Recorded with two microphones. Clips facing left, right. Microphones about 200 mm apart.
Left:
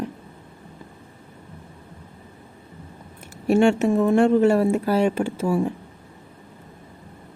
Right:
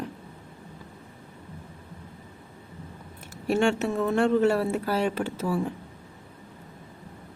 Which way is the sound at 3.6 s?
10° left (ahead or behind).